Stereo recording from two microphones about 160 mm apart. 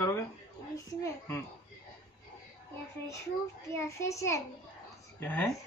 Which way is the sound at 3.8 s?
20° left (ahead or behind).